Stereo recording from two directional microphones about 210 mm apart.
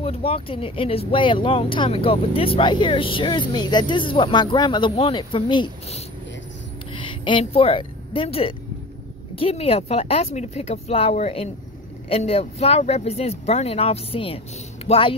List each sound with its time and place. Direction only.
0.0 s speech: 30° left (ahead or behind)